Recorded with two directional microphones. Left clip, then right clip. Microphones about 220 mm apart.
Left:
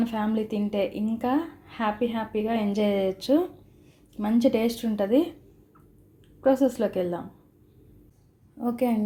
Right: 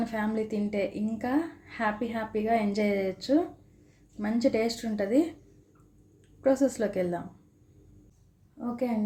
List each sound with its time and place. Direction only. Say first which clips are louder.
0.0 s a woman's voice: left 3 dB; 15° left (ahead or behind)
6.4 s a woman's voice: left 3 dB; 15° left (ahead or behind)
8.8 s a woman's voice: left 5 dB; 30° left (ahead or behind)